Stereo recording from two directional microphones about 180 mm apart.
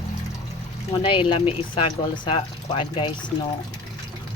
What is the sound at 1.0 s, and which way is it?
Speech, 30° left (ahead or behind).